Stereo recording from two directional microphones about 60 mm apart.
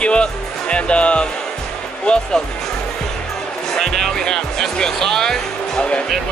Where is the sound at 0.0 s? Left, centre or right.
Centre.